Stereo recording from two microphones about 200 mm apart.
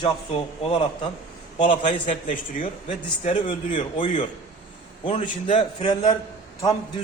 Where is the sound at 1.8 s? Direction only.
40° left (ahead or behind).